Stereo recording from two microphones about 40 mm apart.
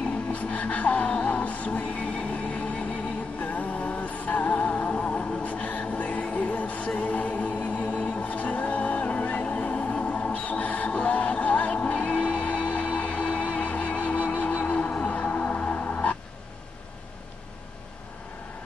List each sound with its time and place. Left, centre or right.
0.3 s music: left
2.1 s a sound: left
3.3 s music: left